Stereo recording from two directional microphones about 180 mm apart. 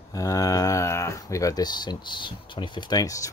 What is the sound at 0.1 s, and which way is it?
Speech, 20° left (ahead or behind).